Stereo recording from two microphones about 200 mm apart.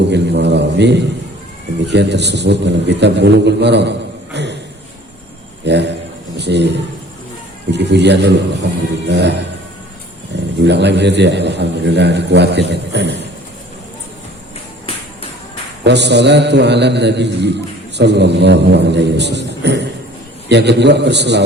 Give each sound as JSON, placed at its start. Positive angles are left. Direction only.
{"t": 0.1, "sound": "a man's voice", "side_deg": -60}
{"t": 5.6, "sound": "a sound", "side_deg": -60}
{"t": 7.7, "sound": "a man's voice", "side_deg": -60}
{"t": 10.6, "sound": "a man's voice", "side_deg": -60}
{"t": 15.8, "sound": "a man's voice", "side_deg": -60}